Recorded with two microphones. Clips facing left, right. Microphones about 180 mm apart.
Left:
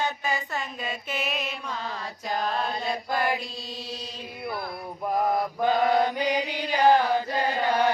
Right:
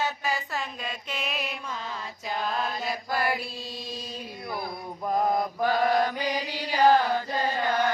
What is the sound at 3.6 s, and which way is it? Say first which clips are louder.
Chant: left 1 dB; 10° right (ahead or behind).